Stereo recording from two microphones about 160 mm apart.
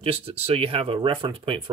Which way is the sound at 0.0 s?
35° right (ahead or behind).